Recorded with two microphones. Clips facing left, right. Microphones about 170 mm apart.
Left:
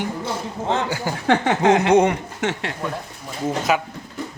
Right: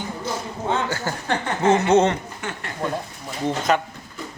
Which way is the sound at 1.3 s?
70° left (ahead or behind).